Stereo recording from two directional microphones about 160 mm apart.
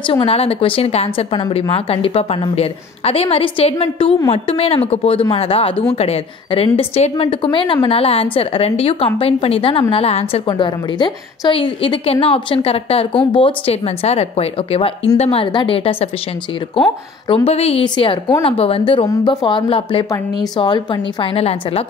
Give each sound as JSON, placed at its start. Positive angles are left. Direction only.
{"t": 0.0, "sound": "a woman's voice", "side_deg": 35}
{"t": 10.5, "sound": "a woman's voice", "side_deg": 30}
{"t": 17.5, "sound": "a woman's voice", "side_deg": 40}